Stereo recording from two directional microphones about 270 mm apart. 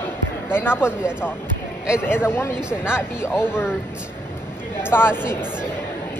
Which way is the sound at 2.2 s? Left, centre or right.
Centre.